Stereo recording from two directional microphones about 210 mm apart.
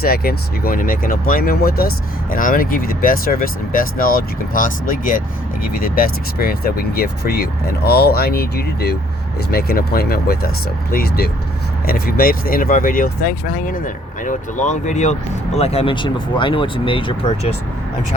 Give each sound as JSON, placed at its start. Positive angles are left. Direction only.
{"t": 0.0, "sound": "speech", "side_deg": 45}